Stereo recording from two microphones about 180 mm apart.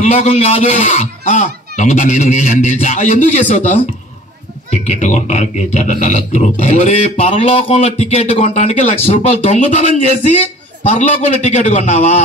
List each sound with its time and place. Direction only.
0.0 s speech: 35° left (ahead or behind)
4.6 s speech: 40° left (ahead or behind)